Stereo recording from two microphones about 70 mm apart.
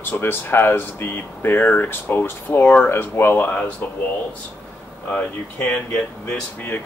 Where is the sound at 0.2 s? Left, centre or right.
Left.